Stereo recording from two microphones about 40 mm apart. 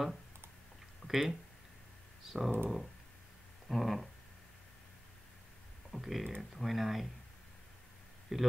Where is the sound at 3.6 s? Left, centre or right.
Centre.